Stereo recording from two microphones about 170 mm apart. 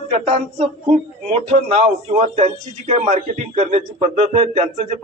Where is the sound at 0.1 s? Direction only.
40° right (ahead or behind).